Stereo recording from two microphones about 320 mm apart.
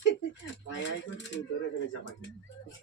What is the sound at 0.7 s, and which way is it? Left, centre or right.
Speech, left.